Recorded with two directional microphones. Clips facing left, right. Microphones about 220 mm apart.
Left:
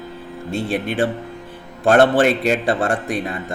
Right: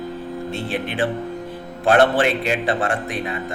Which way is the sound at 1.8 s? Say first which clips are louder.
Left 3 dB; 45° left (ahead or behind).